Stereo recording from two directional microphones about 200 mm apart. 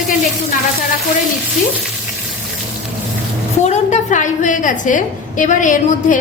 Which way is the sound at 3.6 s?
35° left (ahead or behind).